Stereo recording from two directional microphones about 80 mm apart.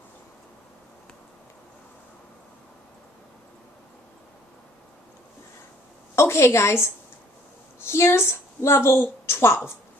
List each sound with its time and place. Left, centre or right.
6.1 s a woman's voice: left